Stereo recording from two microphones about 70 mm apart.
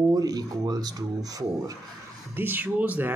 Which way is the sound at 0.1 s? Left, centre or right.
Right.